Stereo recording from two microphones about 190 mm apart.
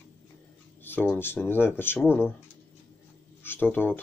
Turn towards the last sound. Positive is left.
turn(degrees=10)  # may be behind; listen again after turning